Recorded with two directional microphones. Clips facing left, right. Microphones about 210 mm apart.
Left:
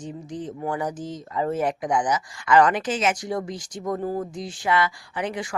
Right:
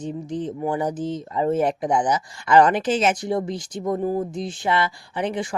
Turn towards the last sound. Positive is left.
turn(degrees=-25)  # may be behind; listen again after turning